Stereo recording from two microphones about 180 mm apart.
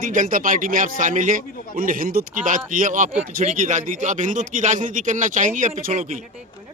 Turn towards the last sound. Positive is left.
turn(degrees=-45)  # may be behind; listen again after turning